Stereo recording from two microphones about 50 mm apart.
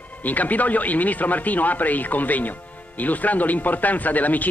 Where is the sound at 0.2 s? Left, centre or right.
Left.